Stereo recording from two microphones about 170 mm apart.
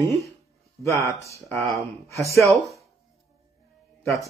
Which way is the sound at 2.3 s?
15° right (ahead or behind).